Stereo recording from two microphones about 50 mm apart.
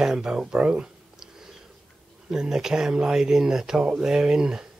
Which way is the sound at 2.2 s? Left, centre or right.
Centre.